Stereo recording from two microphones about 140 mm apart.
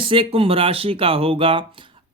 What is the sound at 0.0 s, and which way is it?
Speech, 40° right (ahead or behind).